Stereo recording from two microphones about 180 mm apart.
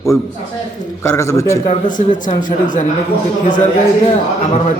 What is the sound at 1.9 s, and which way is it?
Speech, 45° left (ahead or behind).